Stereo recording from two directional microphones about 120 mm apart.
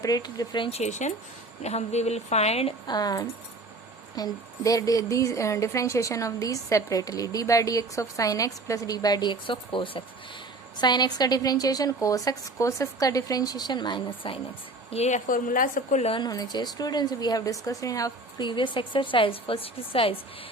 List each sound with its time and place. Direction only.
0.0 s a woman's voice: 35° left (ahead or behind)
0.7 s speech: 70° left (ahead or behind)
1.6 s a woman's voice: 65° left (ahead or behind)
2.8 s a woman's voice: 35° left (ahead or behind)
14.9 s a woman's voice: 65° left (ahead or behind)
15.6 s a woman's voice: 90° left
16.2 s a woman's voice: 35° left (ahead or behind); by 20.1 s 50° left (ahead or behind)